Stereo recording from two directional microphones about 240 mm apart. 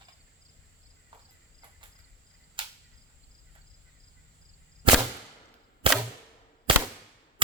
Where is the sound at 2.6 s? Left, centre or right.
Centre.